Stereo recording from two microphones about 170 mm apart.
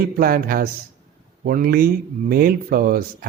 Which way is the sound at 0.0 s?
60° right (ahead or behind).